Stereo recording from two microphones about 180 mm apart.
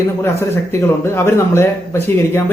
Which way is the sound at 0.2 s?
15° left (ahead or behind).